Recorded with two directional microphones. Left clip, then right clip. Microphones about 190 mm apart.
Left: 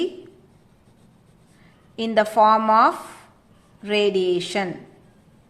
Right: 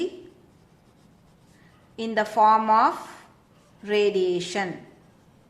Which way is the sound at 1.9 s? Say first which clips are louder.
Left 5 dB; 20° left (ahead or behind).